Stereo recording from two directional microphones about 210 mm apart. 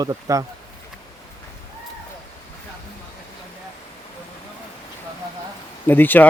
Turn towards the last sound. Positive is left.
turn(degrees=10)  # may be behind; listen again after turning